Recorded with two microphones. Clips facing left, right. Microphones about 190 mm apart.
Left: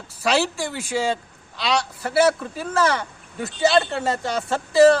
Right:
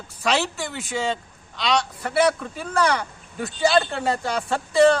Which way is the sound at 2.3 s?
30° left (ahead or behind).